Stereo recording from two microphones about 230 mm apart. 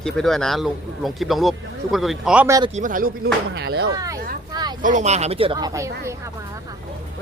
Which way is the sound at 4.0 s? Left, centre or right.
Centre.